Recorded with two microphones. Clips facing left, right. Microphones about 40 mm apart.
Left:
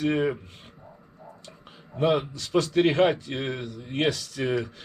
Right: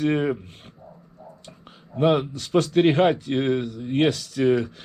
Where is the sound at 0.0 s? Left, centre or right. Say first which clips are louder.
Right 2 dB; right.